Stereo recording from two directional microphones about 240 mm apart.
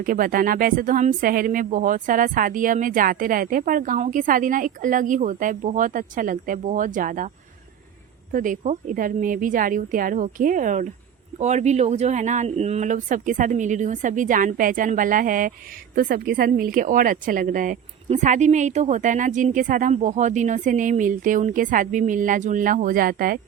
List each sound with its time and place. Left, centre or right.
0.0 s speech: right
8.3 s speech: right